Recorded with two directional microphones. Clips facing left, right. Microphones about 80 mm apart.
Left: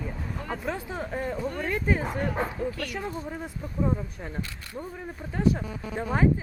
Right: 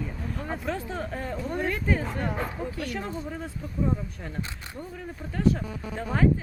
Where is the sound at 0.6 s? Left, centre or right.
Centre.